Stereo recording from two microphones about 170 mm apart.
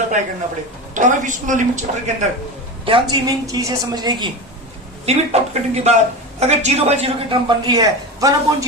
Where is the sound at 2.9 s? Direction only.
30° right (ahead or behind).